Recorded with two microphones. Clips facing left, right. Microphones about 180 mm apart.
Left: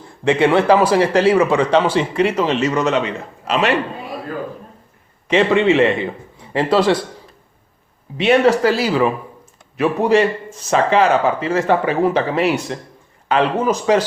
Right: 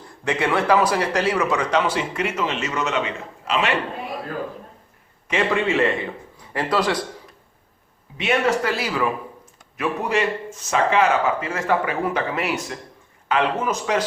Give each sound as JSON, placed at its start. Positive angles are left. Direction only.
{"t": 0.3, "sound": "a man's voice", "side_deg": 25}
{"t": 5.3, "sound": "speech", "side_deg": 30}
{"t": 8.2, "sound": "speech", "side_deg": 35}